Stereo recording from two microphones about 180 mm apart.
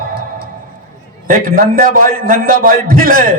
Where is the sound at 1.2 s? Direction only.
50° right (ahead or behind).